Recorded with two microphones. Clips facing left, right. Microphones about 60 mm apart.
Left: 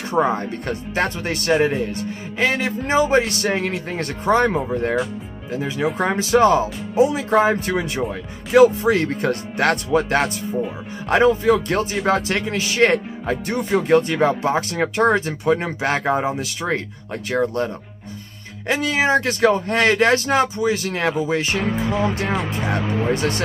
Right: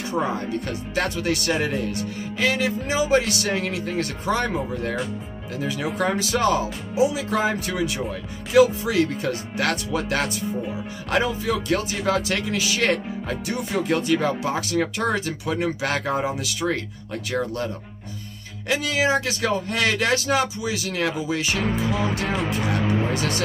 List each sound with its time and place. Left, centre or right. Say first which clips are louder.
0.1 s speech: left 6 dB; left
5.5 s speech: left 4 dB; left
13.6 s music: left 6 dB; left
13.8 s speech: left 5 dB; left
18.7 s speech: left 3 dB; left